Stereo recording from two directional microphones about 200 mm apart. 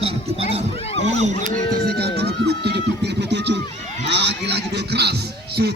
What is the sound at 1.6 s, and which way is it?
Speech, 30° left (ahead or behind).